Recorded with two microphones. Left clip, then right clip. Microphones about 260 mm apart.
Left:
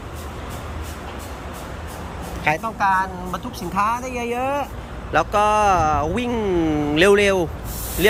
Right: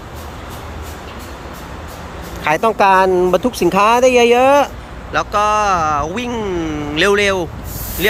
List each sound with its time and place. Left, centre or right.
2.6 s speech: right
5.1 s speech: centre